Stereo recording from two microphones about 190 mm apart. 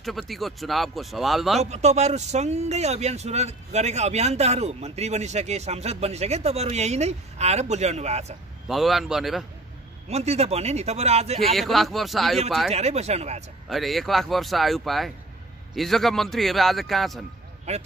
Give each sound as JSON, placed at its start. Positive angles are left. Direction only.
{"t": 0.0, "sound": "speech", "side_deg": 0}
{"t": 1.6, "sound": "speech", "side_deg": -35}
{"t": 8.6, "sound": "speech", "side_deg": 0}
{"t": 10.0, "sound": "speech", "side_deg": -35}
{"t": 11.4, "sound": "speech", "side_deg": 0}
{"t": 12.7, "sound": "speech", "side_deg": -35}
{"t": 13.7, "sound": "speech", "side_deg": 0}
{"t": 17.7, "sound": "speech", "side_deg": -35}